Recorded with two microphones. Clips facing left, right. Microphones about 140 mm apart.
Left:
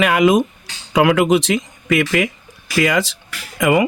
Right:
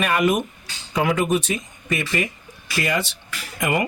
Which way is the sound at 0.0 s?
90° left.